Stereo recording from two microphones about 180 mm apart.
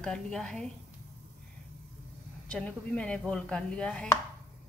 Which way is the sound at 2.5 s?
5° left (ahead or behind).